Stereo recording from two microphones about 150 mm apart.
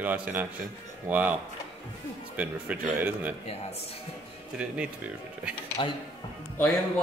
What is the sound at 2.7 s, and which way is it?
Speech, 10° right (ahead or behind).